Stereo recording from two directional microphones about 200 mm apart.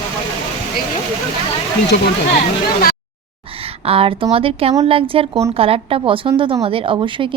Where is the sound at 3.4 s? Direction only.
30° right (ahead or behind).